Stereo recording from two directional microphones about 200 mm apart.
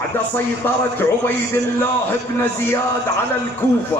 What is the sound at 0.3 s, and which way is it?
A man's voice, 10° left (ahead or behind).